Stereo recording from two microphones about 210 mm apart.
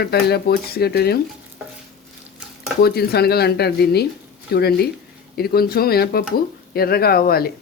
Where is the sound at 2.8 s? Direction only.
50° left (ahead or behind).